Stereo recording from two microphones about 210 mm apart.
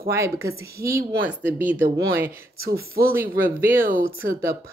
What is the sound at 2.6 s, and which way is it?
Speech, 45° right (ahead or behind).